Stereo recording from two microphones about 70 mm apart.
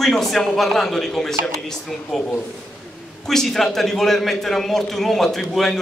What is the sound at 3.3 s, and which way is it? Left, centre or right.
A man's voice, centre.